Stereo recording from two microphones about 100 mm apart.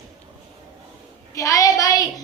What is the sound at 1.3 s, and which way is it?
Speech, 35° left (ahead or behind).